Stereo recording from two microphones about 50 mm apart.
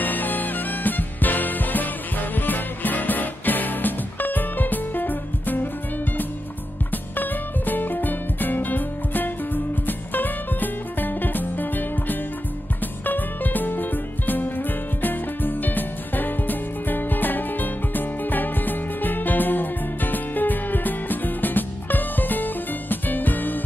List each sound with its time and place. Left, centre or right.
0.0 s music: left
6.9 s music: left